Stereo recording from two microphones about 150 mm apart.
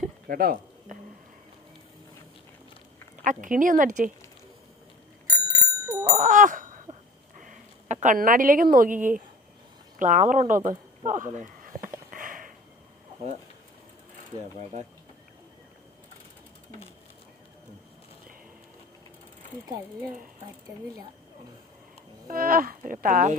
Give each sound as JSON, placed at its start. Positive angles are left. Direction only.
{"t": 0.3, "sound": "a sound", "side_deg": -75}
{"t": 3.2, "sound": "a woman's voice", "side_deg": -60}
{"t": 5.5, "sound": "bicycle bell", "side_deg": -20}
{"t": 6.1, "sound": "bicycle bell", "side_deg": -60}
{"t": 7.3, "sound": "a sound", "side_deg": -60}
{"t": 8.0, "sound": "a woman's voice", "side_deg": -65}
{"t": 12.1, "sound": "sniff", "side_deg": -65}
{"t": 14.6, "sound": "speech", "side_deg": -45}
{"t": 22.3, "sound": "speech", "side_deg": -75}